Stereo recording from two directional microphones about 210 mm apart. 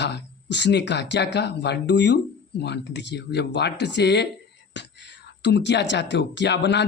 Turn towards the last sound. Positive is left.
turn(degrees=55)  # may be behind; listen again after turning